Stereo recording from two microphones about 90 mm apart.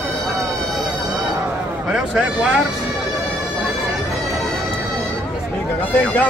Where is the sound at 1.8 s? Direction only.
5° right (ahead or behind).